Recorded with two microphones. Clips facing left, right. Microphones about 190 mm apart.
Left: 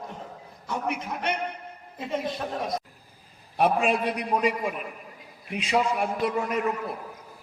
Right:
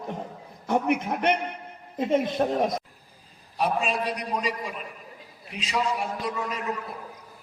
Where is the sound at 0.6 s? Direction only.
55° right (ahead or behind).